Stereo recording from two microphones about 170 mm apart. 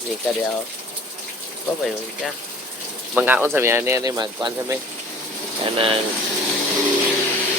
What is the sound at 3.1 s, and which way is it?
Speech, 10° right (ahead or behind).